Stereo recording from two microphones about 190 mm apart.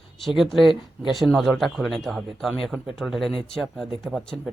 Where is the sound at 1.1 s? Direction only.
Centre (ahead or behind).